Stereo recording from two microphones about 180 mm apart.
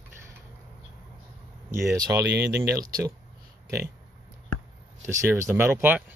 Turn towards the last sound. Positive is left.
turn(degrees=-10)  # may be behind; listen again after turning